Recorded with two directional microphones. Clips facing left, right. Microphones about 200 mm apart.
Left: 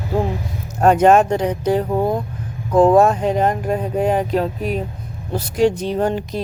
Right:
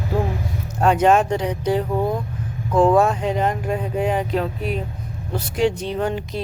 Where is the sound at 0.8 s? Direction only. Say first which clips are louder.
Left 4 dB; 45° left (ahead or behind).